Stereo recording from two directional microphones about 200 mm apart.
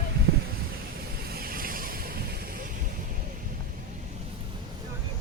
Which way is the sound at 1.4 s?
45° right (ahead or behind).